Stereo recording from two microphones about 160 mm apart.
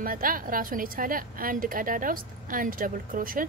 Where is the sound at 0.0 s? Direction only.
60° right (ahead or behind).